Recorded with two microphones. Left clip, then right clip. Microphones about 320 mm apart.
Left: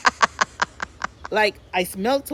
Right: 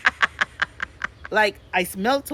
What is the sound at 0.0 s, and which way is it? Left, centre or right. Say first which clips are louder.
Chuckle: left 2 dB; centre.